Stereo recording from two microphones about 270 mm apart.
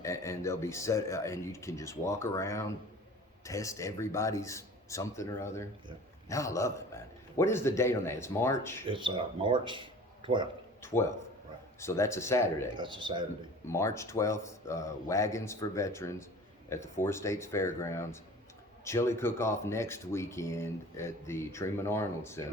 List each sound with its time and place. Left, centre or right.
0.0 s speech: centre
8.9 s speech: centre
10.8 s speech: centre
12.7 s a man's voice: centre
13.7 s speech: centre